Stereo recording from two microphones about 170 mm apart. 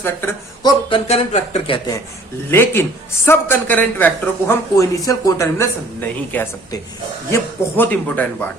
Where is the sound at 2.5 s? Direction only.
10° left (ahead or behind).